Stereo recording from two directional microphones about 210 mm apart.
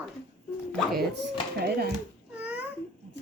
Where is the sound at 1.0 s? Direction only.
55° right (ahead or behind).